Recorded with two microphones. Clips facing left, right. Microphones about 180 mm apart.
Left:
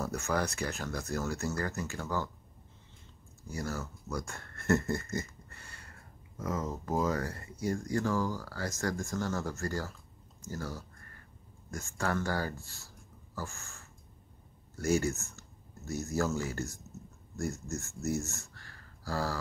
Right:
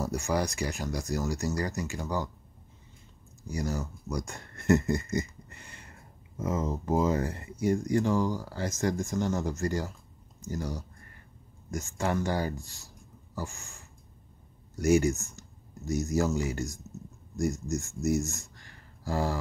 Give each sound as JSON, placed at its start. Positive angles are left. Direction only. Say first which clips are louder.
{"t": 0.0, "sound": "speech", "louder": "right 3 dB", "side_deg": -15}
{"t": 3.4, "sound": "speech", "louder": "right 5 dB", "side_deg": -15}
{"t": 10.5, "sound": "a sound", "louder": "right 5 dB", "side_deg": -15}
{"t": 11.7, "sound": "speech", "louder": "right 4 dB", "side_deg": -20}